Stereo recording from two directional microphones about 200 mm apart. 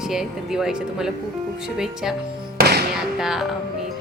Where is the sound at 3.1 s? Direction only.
Centre (ahead or behind).